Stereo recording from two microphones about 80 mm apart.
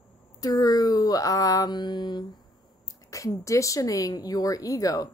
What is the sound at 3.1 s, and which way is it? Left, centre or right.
A woman's voice, left.